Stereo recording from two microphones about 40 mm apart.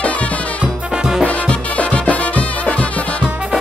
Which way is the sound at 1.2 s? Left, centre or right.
Left.